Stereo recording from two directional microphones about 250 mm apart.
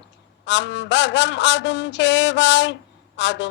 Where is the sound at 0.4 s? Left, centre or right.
Left.